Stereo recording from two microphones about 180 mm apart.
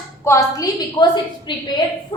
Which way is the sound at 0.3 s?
20° left (ahead or behind).